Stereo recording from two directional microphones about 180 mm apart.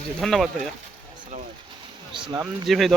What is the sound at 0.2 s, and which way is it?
Speech, centre (ahead or behind).